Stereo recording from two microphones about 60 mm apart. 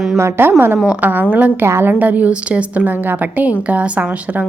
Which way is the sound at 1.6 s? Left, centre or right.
Right.